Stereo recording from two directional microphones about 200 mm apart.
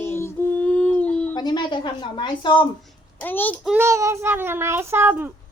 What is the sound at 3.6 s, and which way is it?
A child's voice, 10° right (ahead or behind).